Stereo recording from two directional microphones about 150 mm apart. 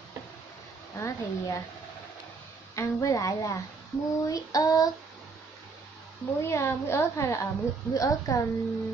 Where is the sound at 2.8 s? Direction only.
20° left (ahead or behind).